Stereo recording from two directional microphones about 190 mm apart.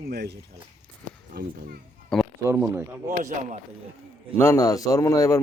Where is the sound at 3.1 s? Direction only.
40° right (ahead or behind).